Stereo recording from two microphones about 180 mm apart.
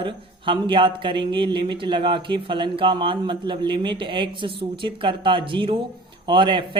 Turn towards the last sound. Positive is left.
turn(degrees=-25)  # may be behind; listen again after turning